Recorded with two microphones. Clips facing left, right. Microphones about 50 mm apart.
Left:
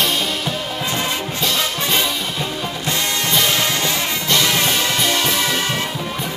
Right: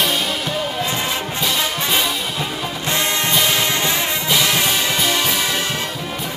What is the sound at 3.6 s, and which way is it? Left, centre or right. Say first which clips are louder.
Music: right 1 dB; centre.